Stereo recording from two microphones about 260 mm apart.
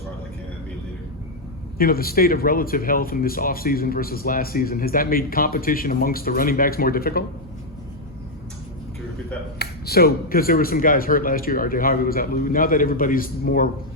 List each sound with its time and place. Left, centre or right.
1.8 s speech: left
9.6 s speech: left